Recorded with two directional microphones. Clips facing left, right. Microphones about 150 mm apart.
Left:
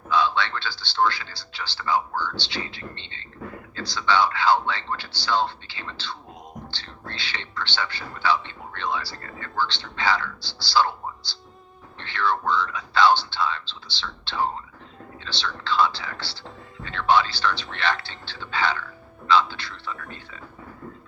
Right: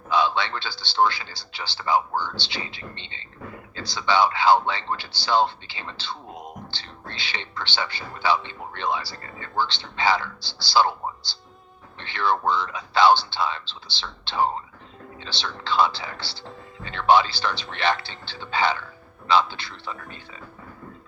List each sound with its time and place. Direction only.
0.1 s a man's voice: 15° right (ahead or behind)